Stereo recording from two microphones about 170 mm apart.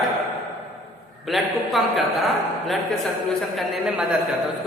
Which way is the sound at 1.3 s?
Centre (ahead or behind).